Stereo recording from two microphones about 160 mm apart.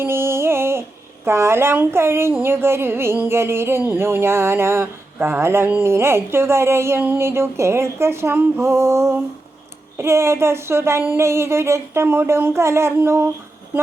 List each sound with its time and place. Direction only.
0.0 s speech: 15° right (ahead or behind)